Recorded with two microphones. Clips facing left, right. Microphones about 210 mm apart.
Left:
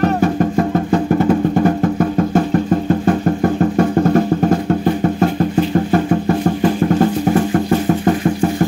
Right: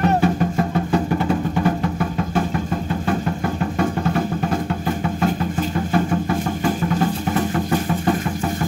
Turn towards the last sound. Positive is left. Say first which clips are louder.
# left 7 dB
turn(degrees=45)  # may be behind; listen again after turning